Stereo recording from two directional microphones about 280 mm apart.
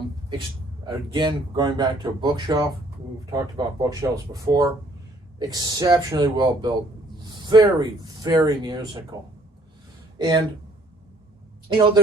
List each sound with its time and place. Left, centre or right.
0.9 s speech: centre
10.2 s speech: centre